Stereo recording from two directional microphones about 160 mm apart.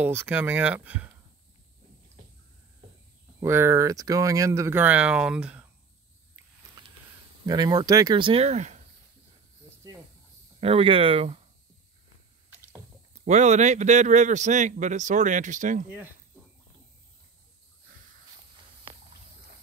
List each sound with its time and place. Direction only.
0.0 s speech: 15° right (ahead or behind)
3.4 s speech: 15° right (ahead or behind)
7.4 s speech: 25° right (ahead or behind); by 8.8 s 45° right (ahead or behind)
10.6 s speech: 35° right (ahead or behind)
13.2 s a man's voice: 45° right (ahead or behind)